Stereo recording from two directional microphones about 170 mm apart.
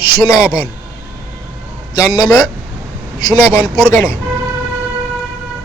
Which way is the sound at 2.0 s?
20° left (ahead or behind).